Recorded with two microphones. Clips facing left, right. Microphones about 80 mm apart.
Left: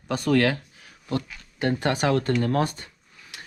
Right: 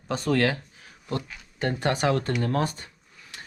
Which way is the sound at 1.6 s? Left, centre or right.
Right.